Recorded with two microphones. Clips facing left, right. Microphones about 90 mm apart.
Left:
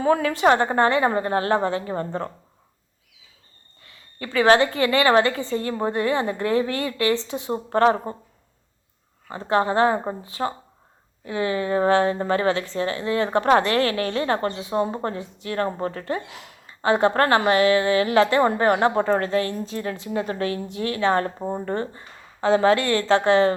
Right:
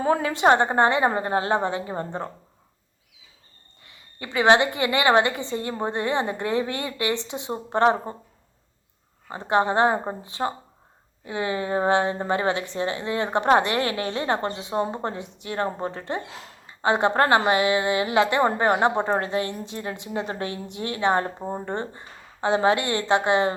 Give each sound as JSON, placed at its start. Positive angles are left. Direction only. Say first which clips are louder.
{"t": 0.0, "sound": "a woman's voice", "louder": "left 1 dB", "side_deg": -30}
{"t": 4.2, "sound": "a woman's voice", "louder": "left 1 dB", "side_deg": -20}
{"t": 9.2, "sound": "a woman's voice", "louder": "even", "side_deg": -25}
{"t": 16.3, "sound": "a sound", "louder": "right 1 dB", "side_deg": -35}
{"t": 16.8, "sound": "a woman's voice", "louder": "left 1 dB", "side_deg": -20}